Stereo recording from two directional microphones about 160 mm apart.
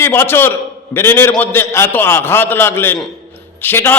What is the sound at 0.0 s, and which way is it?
A man's voice, 15° left (ahead or behind).